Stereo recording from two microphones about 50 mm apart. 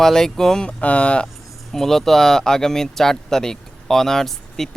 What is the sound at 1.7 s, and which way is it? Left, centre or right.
Speech, centre.